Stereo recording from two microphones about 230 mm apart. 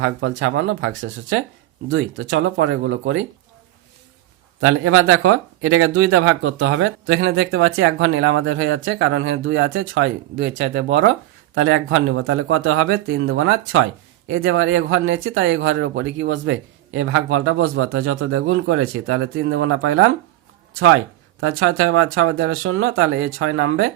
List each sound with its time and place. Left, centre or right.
0.0 s speech: right
4.6 s speech: right
11.6 s speech: right